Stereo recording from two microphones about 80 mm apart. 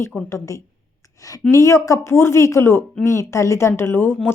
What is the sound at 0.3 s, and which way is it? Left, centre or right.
Speech, left.